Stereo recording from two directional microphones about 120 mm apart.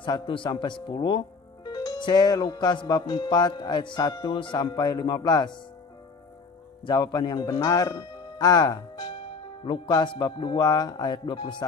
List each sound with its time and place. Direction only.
0.0 s speech: 40° left (ahead or behind)
6.9 s speech: 35° left (ahead or behind)